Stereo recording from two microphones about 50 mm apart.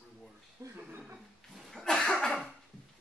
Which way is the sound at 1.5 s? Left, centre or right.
Centre.